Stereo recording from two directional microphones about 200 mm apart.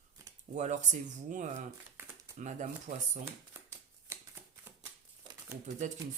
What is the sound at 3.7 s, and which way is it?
Shuffling cards, 15° right (ahead or behind).